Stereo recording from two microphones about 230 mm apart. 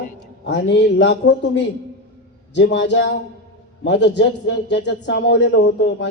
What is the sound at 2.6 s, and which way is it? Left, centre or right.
A man's voice, left.